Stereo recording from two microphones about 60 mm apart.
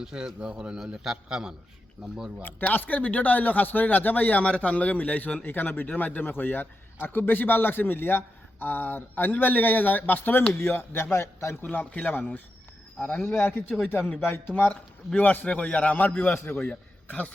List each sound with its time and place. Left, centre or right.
0.0 s a man's voice: centre
2.4 s speech: left
11.6 s a man's voice: left
13.2 s speech: left
14.5 s a man's voice: left